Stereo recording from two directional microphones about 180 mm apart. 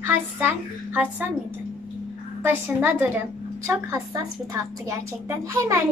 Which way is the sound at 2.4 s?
10° right (ahead or behind).